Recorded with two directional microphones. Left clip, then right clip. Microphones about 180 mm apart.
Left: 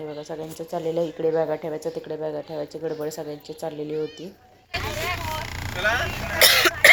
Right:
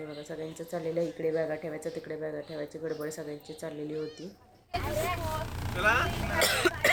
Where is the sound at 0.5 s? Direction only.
10° left (ahead or behind).